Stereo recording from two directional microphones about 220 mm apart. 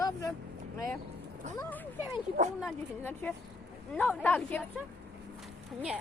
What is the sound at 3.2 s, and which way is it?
Speech, 5° left (ahead or behind).